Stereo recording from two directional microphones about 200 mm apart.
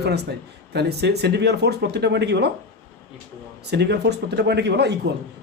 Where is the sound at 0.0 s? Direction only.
55° right (ahead or behind).